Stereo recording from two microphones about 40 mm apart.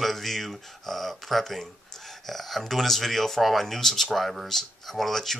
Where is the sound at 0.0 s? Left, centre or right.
Centre.